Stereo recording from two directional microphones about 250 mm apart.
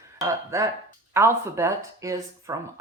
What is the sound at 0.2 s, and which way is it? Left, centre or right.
Speech, centre.